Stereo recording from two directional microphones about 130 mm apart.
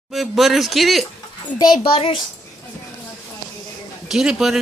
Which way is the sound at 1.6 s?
40° left (ahead or behind).